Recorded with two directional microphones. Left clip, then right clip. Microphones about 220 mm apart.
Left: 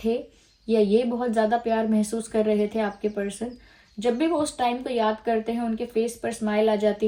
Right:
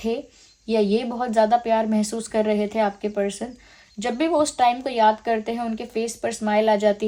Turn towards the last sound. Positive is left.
turn(degrees=-35)  # may be behind; listen again after turning